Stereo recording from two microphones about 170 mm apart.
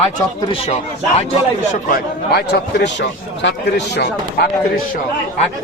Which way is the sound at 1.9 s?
70° left (ahead or behind).